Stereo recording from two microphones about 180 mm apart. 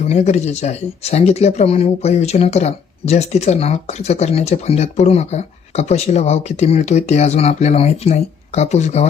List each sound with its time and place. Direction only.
0.0 s speech: 40° left (ahead or behind)